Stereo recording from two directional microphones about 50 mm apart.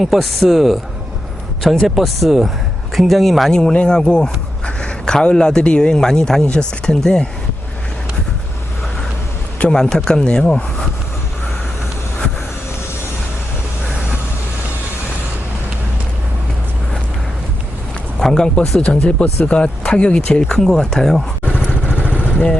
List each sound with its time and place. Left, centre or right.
0.0 s speech: centre
1.6 s speech: centre
2.0 s speech: centre
3.5 s speech: centre
9.7 s speech: centre
18.2 s speech: centre
18.9 s speech: left
20.4 s speech: centre